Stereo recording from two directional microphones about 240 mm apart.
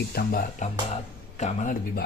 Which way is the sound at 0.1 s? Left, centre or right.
Left.